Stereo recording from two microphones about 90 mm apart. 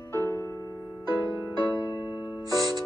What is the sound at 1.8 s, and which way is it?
Music, 50° left (ahead or behind).